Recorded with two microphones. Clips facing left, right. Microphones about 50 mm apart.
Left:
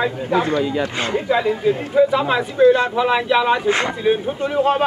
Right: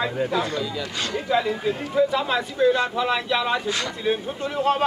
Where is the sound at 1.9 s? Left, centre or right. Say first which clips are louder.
Left 5 dB; centre.